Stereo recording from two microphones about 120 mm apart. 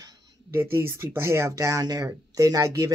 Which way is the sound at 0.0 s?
35° right (ahead or behind).